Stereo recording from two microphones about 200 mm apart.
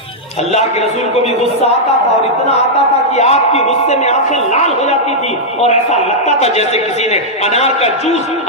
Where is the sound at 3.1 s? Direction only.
35° left (ahead or behind).